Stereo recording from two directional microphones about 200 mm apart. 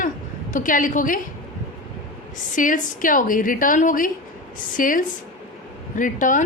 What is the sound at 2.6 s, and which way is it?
A woman's voice, 40° left (ahead or behind).